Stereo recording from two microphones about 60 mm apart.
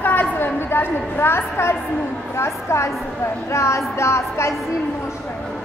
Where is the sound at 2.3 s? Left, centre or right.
Left.